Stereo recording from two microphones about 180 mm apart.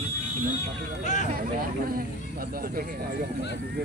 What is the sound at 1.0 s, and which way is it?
Speech, 40° left (ahead or behind).